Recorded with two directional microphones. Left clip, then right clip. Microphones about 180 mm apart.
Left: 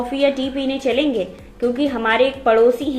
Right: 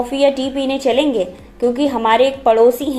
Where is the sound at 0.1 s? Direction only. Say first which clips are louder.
Right 3 dB; 15° right (ahead or behind).